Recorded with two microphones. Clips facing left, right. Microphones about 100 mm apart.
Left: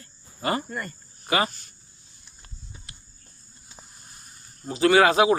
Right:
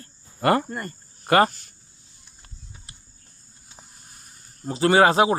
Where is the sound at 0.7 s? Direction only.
35° right (ahead or behind).